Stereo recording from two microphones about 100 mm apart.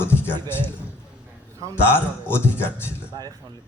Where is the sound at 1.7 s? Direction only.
25° left (ahead or behind).